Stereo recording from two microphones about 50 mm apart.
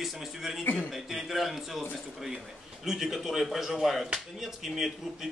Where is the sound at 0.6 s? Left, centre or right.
Left.